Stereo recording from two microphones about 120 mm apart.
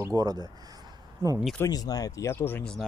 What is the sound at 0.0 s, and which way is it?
Speech, 30° right (ahead or behind).